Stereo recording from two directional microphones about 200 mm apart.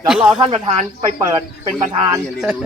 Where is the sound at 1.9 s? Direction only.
20° right (ahead or behind).